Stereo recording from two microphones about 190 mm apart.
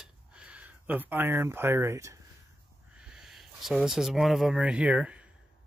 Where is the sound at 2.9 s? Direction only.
5° right (ahead or behind).